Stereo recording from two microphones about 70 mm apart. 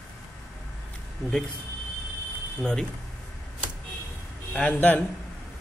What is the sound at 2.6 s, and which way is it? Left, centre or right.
Speech, centre.